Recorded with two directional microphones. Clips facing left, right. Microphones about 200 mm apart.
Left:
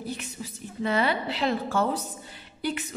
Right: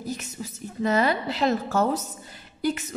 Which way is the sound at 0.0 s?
40° right (ahead or behind).